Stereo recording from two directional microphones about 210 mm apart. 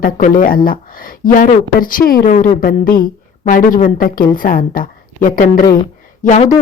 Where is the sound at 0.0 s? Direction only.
40° left (ahead or behind).